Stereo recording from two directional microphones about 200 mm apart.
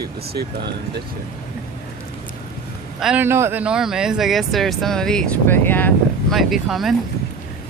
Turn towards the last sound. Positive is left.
turn(degrees=0)  # may be behind; listen again after turning